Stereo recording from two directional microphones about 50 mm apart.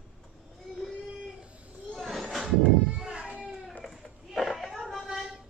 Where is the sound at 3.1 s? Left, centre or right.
Right.